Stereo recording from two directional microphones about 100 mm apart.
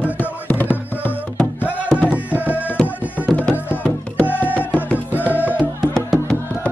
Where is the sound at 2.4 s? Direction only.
15° right (ahead or behind).